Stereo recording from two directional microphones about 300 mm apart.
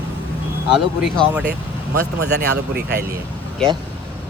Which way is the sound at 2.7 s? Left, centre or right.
Right.